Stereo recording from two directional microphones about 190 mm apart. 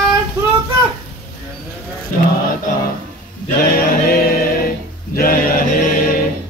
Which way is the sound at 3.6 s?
50° left (ahead or behind).